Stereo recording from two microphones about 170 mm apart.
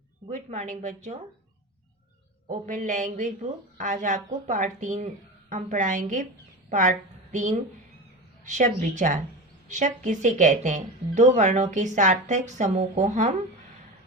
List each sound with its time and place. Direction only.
0.3 s speech: 40° right (ahead or behind)
2.6 s a woman's voice: 45° right (ahead or behind)